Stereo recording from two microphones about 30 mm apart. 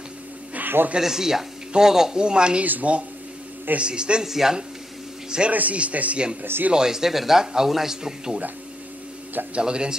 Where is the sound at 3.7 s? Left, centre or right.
Right.